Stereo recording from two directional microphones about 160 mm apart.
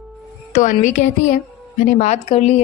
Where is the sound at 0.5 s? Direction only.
55° left (ahead or behind).